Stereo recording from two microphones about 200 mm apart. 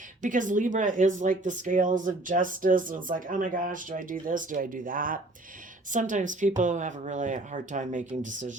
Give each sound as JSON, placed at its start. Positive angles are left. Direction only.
{"t": 0.2, "sound": "speech", "side_deg": -40}